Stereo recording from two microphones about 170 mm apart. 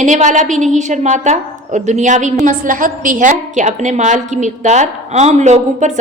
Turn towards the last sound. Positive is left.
turn(degrees=-45)  # may be behind; listen again after turning